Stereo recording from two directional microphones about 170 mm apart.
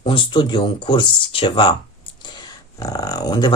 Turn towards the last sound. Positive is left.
turn(degrees=25)  # may be behind; listen again after turning